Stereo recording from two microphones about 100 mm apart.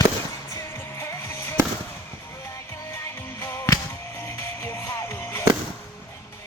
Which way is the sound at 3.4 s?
25° left (ahead or behind).